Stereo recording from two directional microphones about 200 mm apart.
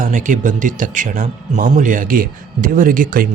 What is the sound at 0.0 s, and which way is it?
Speech, 40° right (ahead or behind).